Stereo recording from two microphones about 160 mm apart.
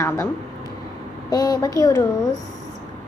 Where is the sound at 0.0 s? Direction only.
15° left (ahead or behind).